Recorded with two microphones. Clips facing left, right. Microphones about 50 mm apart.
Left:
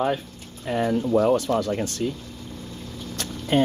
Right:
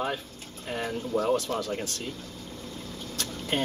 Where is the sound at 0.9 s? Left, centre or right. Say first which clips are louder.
Left 7 dB; left.